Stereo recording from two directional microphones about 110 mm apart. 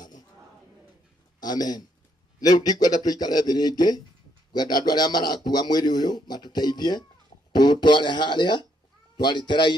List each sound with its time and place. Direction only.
1.4 s a man's voice: 40° left (ahead or behind)